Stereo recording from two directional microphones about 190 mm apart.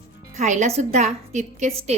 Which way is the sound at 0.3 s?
40° right (ahead or behind).